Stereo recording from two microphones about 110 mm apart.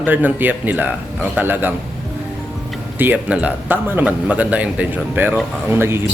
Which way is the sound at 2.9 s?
15° right (ahead or behind).